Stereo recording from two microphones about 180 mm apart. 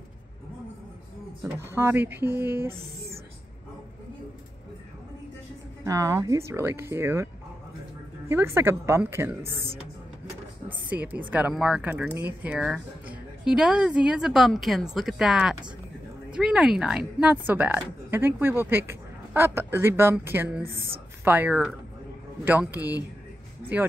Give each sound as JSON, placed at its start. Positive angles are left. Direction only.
{"t": 1.7, "sound": "speech", "side_deg": -15}
{"t": 2.7, "sound": "speech", "side_deg": -35}
{"t": 5.9, "sound": "speech", "side_deg": -20}
{"t": 8.3, "sound": "speech", "side_deg": -15}
{"t": 10.7, "sound": "speech", "side_deg": -10}